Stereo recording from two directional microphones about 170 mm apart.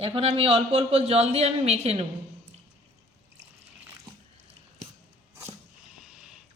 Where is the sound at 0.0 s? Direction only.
35° right (ahead or behind).